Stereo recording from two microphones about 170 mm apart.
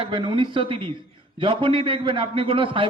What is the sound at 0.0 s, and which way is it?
A man's voice, 30° right (ahead or behind).